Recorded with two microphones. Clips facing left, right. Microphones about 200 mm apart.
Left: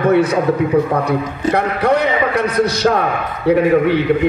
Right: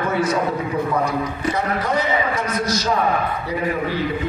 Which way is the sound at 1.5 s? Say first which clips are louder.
Left 8 dB; 65° left (ahead or behind).